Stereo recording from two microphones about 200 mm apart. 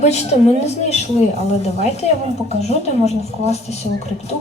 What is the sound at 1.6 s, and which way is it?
Speech, 35° left (ahead or behind).